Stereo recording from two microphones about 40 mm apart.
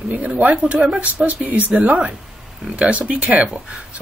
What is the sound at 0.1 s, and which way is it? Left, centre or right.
Speech, right.